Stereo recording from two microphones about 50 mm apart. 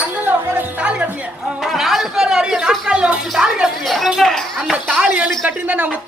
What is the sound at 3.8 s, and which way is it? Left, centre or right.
Speech, centre.